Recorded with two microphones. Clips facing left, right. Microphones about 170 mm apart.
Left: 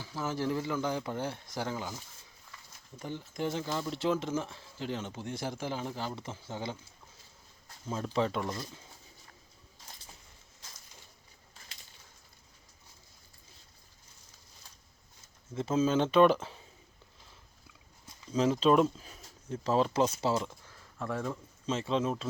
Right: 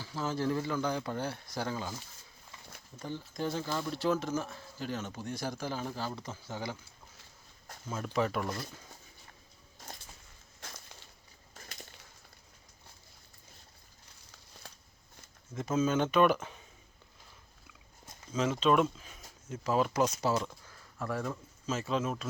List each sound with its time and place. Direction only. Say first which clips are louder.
0.0 s speech: even; 15° left (ahead or behind)
3.0 s speech: left 1 dB; 15° left (ahead or behind)
7.9 s speech: left 1 dB; 30° left (ahead or behind)
10.6 s a sound: right 8 dB; 65° right (ahead or behind)
11.5 s a sound: right 8 dB; 45° right (ahead or behind)
14.6 s shuffling cards: right 7 dB; 65° right (ahead or behind)
15.5 s speech: left 2 dB; 30° left (ahead or behind)
18.3 s speech: left 3 dB; 35° left (ahead or behind)
20.3 s speech: even; 15° left (ahead or behind)
21.1 s speech: left 1 dB; 5° right (ahead or behind)
21.7 s speech: left 2 dB; 25° left (ahead or behind)